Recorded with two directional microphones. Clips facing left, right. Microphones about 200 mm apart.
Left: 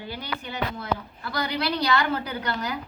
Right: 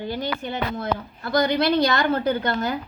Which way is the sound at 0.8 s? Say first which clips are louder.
Right 3 dB; 45° right (ahead or behind).